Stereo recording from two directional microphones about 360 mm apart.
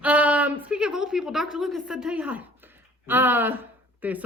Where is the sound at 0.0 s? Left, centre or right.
Centre.